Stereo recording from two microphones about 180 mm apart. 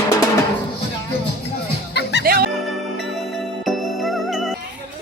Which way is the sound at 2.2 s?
55° right (ahead or behind).